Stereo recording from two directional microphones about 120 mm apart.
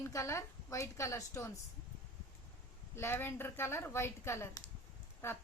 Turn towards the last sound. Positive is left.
turn(degrees=20)  # may be behind; listen again after turning